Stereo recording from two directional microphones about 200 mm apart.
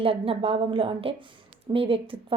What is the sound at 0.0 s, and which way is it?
A woman's voice, 30° right (ahead or behind).